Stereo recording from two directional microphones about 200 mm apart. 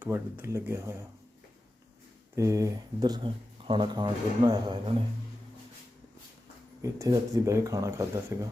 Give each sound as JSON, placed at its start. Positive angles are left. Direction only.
{"t": 0.0, "sound": "speech", "side_deg": -10}
{"t": 2.3, "sound": "speech", "side_deg": -15}
{"t": 6.8, "sound": "speech", "side_deg": -15}